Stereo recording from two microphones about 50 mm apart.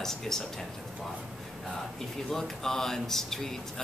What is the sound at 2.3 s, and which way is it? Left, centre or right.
Speech, centre.